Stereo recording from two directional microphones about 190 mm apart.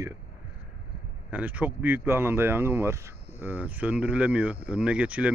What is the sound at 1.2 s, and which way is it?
Speech, 10° right (ahead or behind).